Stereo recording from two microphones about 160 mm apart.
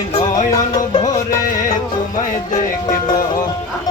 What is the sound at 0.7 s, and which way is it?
Music, 25° left (ahead or behind).